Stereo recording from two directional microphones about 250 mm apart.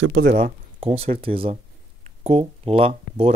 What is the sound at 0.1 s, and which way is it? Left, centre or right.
Speech, right.